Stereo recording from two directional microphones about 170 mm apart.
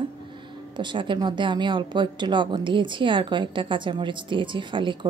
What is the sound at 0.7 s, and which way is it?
Speech, 30° right (ahead or behind).